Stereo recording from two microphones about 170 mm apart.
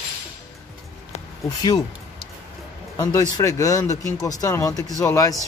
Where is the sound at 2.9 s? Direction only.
20° left (ahead or behind).